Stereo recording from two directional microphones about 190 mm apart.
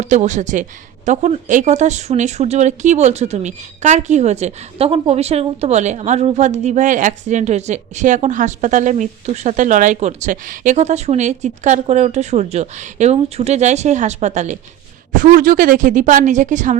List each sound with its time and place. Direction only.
0.0 s a woman's voice: 40° right (ahead or behind)